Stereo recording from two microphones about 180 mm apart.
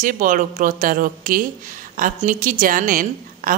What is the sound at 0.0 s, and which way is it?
Speech, 45° right (ahead or behind).